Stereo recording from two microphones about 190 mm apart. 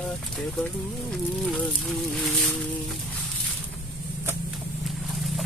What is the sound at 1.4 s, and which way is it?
Speech, centre (ahead or behind).